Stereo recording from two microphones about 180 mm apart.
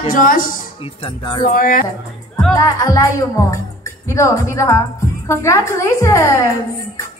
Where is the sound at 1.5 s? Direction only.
50° left (ahead or behind).